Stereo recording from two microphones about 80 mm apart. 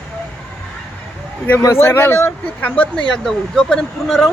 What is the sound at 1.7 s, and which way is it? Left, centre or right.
Speech, left.